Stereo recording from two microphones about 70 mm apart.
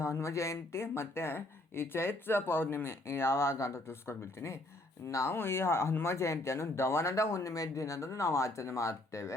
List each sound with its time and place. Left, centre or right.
0.0 s speech: left